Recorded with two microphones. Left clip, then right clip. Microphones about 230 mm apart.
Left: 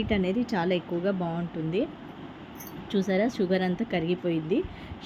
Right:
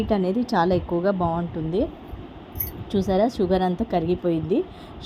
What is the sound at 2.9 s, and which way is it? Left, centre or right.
A woman's voice, centre.